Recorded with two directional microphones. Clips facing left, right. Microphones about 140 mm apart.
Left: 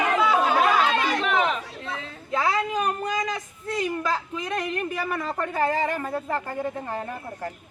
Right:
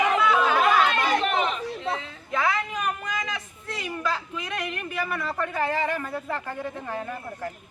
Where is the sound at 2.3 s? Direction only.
35° left (ahead or behind).